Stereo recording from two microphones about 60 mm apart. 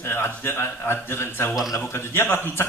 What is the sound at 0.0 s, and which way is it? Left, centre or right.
Speech, left.